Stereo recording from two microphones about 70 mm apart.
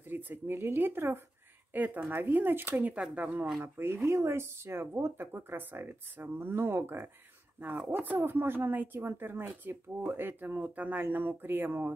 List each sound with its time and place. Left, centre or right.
0.1 s a woman's voice: right
2.9 s speech: centre
3.6 s a woman's voice: right